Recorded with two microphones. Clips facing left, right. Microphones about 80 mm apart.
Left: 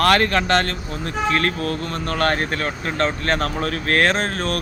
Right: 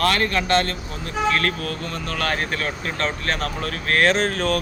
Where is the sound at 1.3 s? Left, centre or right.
Left.